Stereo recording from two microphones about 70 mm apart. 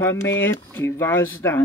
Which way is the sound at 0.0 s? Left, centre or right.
Left.